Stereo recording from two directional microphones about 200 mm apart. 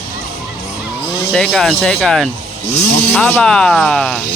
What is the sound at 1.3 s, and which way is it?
Speech, centre (ahead or behind).